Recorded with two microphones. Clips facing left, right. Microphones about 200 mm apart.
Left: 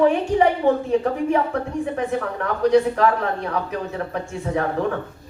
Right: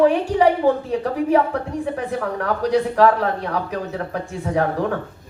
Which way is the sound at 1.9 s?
35° right (ahead or behind).